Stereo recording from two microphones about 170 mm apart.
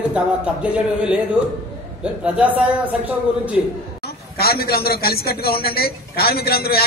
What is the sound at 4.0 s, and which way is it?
A man's voice, 65° left (ahead or behind).